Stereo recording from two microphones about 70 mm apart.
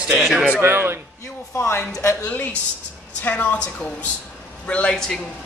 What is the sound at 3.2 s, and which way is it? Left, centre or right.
A woman's voice, left.